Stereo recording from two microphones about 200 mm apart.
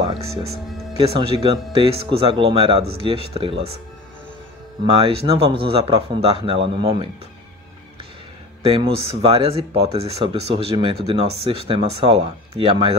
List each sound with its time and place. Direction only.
1.0 s speech: 30° right (ahead or behind)
4.8 s speech: 30° right (ahead or behind)
8.6 s speech: 30° right (ahead or behind)